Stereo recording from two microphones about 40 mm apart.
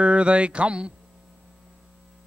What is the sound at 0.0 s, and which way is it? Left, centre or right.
Mantra, right.